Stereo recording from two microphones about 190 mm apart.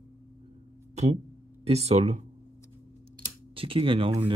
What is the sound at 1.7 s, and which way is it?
Speech, 35° right (ahead or behind).